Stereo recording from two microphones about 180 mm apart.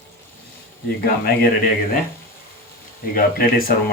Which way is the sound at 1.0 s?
55° left (ahead or behind).